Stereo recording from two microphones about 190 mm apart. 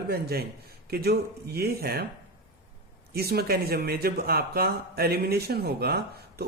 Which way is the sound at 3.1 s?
55° right (ahead or behind).